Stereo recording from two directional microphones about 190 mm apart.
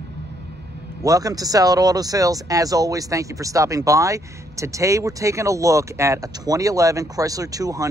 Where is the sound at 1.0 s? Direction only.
20° right (ahead or behind).